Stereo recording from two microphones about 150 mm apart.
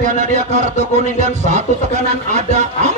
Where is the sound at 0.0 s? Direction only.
55° right (ahead or behind).